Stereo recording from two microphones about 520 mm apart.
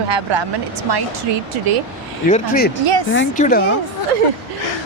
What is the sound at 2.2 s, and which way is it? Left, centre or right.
A woman's voice, centre.